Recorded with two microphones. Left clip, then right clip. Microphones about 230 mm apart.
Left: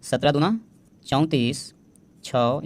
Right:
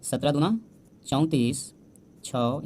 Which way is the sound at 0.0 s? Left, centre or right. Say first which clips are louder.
Left 5 dB; left.